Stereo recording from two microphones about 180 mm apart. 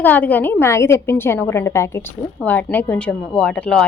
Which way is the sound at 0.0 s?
10° left (ahead or behind).